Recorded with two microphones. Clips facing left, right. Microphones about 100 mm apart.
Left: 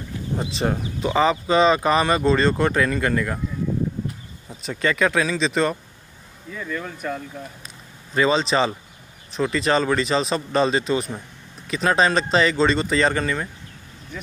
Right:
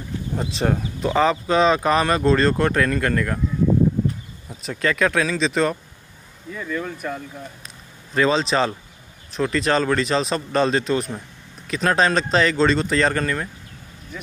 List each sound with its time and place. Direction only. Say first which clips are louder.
0.4 s speech: right 2 dB; centre (ahead or behind)
4.5 s speech: even; centre (ahead or behind)